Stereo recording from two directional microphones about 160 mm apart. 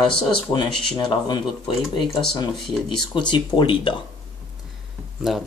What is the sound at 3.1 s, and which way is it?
Speech, 30° left (ahead or behind).